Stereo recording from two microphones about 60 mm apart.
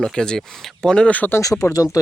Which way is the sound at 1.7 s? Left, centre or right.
Left.